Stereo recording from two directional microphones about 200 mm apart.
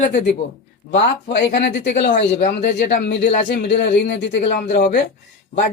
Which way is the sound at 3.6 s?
60° left (ahead or behind).